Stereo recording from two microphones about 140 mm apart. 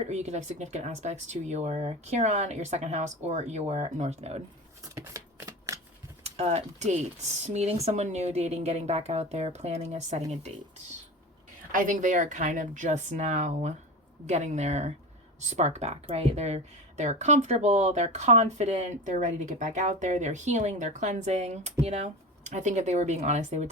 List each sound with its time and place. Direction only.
0.0 s a woman's voice: 50° right (ahead or behind)
4.8 s shuffling cards: 25° right (ahead or behind)
6.2 s a woman's voice: 50° right (ahead or behind)
11.7 s a woman's voice: 70° right (ahead or behind)